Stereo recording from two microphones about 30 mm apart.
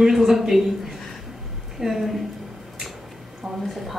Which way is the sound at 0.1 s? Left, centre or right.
Centre.